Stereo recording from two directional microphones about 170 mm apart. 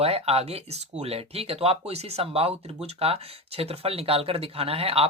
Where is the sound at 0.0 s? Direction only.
40° right (ahead or behind).